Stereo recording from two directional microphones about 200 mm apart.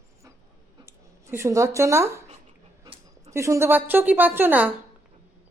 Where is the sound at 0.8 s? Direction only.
15° right (ahead or behind).